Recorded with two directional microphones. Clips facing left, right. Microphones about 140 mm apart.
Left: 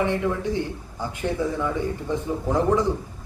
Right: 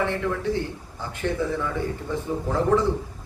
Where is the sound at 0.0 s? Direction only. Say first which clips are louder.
Left 2 dB; 15° left (ahead or behind).